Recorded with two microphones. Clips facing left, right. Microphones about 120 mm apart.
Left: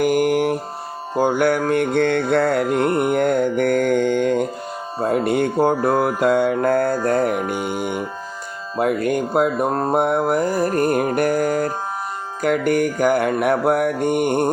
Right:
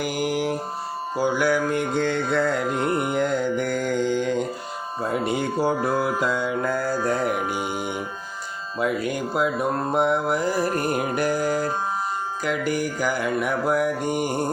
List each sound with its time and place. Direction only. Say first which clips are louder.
0.0 s mantra: left 8 dB; 50° left (ahead or behind)
7.4 s mantra: left 3 dB; centre (ahead or behind)
8.8 s mantra: left 5 dB; 55° left (ahead or behind)